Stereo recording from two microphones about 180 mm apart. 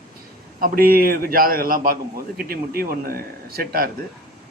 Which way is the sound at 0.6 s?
55° right (ahead or behind).